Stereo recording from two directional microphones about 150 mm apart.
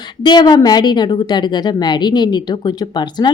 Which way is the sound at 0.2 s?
30° left (ahead or behind).